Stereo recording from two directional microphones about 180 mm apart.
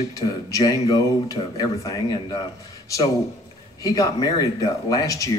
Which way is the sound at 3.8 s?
20° left (ahead or behind).